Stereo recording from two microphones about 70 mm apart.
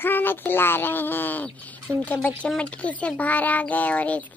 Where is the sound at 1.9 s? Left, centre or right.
Right.